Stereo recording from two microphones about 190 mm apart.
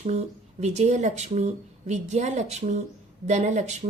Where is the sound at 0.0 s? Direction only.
35° right (ahead or behind).